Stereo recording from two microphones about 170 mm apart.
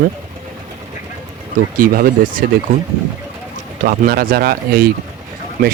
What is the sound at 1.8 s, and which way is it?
Speech, 55° right (ahead or behind).